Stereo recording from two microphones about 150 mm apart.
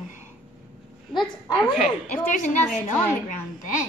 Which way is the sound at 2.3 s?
55° left (ahead or behind).